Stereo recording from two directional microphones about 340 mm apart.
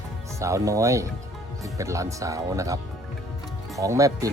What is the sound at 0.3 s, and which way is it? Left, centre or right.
Speech, centre.